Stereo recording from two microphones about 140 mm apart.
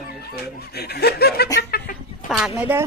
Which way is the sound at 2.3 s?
5° right (ahead or behind).